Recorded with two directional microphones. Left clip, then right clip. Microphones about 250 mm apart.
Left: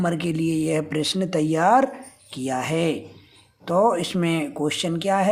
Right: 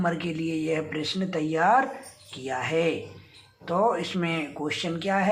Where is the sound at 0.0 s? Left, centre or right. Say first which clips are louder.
Left 4 dB; left.